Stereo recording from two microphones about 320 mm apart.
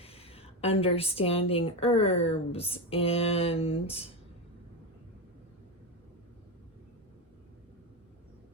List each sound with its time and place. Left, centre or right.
0.0 s a woman's voice: centre